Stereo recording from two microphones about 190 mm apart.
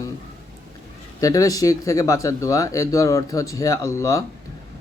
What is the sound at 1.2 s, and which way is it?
Speech, 20° left (ahead or behind).